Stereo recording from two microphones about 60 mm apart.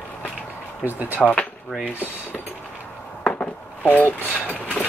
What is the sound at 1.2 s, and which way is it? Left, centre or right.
Speech, centre.